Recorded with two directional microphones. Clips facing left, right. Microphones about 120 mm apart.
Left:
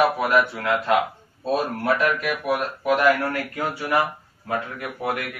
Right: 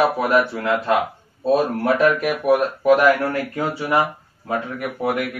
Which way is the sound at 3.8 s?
20° right (ahead or behind).